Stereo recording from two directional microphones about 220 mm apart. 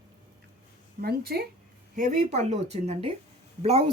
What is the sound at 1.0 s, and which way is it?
A woman's voice, 45° right (ahead or behind).